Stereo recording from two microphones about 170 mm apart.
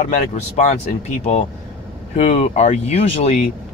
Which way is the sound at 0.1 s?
45° left (ahead or behind).